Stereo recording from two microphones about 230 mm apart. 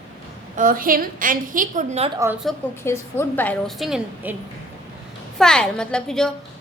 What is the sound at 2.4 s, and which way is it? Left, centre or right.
A woman's voice, centre.